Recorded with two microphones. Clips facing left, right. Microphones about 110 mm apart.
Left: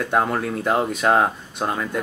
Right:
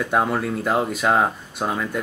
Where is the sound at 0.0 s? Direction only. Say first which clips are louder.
Even; centre (ahead or behind).